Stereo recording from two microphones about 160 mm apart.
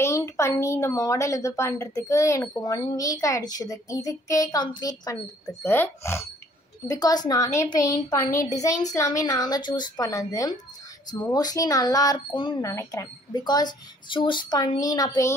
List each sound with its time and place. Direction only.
0.0 s a woman's voice: 20° left (ahead or behind)
12.7 s a woman's voice: 20° left (ahead or behind)